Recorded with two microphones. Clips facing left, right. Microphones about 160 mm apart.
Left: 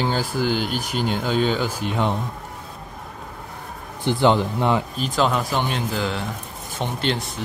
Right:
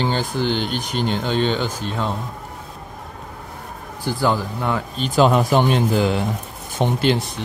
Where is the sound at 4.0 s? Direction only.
20° left (ahead or behind).